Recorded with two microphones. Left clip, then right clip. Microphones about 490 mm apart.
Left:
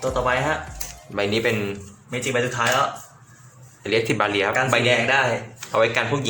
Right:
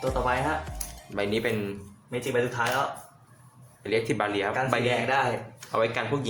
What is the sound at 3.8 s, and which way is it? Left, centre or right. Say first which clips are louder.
Speech: left 6 dB; right.